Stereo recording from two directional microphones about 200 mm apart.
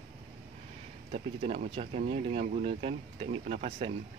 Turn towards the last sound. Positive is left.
turn(degrees=-30)  # may be behind; listen again after turning